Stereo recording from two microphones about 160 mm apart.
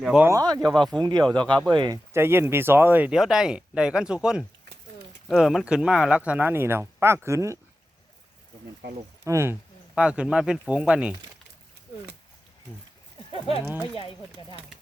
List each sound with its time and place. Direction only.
0.0 s speech: 5° right (ahead or behind)
0.3 s speech: 25° right (ahead or behind)
0.7 s speech: 5° left (ahead or behind)
1.0 s speech: 25° right (ahead or behind)
2.1 s speech: 15° right (ahead or behind)
9.2 s speech: 15° right (ahead or behind)
13.8 s speech: 30° left (ahead or behind)